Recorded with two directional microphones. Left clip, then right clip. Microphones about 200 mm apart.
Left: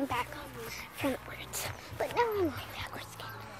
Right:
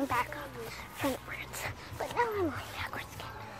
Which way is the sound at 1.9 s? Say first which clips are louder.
Left 2 dB; 40° left (ahead or behind).